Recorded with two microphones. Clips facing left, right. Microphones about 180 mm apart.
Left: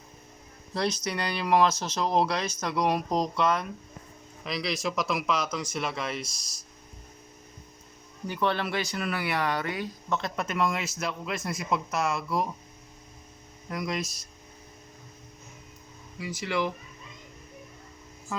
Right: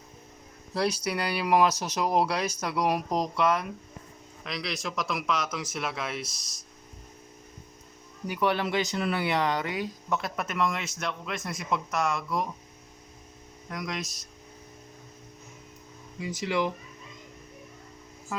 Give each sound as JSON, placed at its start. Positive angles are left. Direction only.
{"t": 0.7, "sound": "speech", "side_deg": -5}
{"t": 8.3, "sound": "speech", "side_deg": -15}
{"t": 13.7, "sound": "speech", "side_deg": 5}
{"t": 16.2, "sound": "speech", "side_deg": -20}